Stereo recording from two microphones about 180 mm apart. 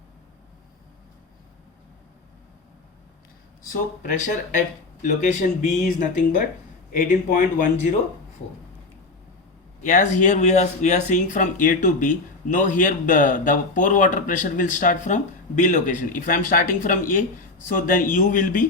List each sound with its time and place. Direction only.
5.0 s speech: 40° left (ahead or behind)
9.8 s speech: 45° left (ahead or behind)